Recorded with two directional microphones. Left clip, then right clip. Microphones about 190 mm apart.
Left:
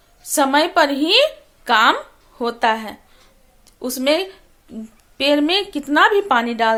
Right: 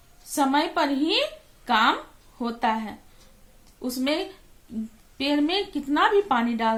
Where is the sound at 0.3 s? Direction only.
40° left (ahead or behind).